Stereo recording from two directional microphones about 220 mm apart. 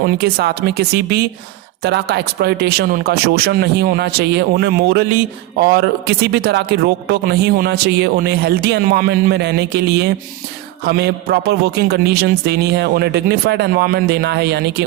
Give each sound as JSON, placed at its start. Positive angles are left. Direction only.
{"t": 0.0, "sound": "speech", "side_deg": -45}